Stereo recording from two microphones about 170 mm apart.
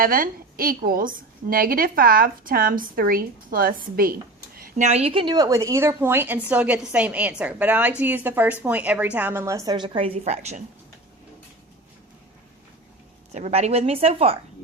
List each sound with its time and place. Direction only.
0.0 s a woman's voice: 60° right (ahead or behind)
4.8 s a woman's voice: 40° right (ahead or behind)
13.3 s a woman's voice: 40° right (ahead or behind)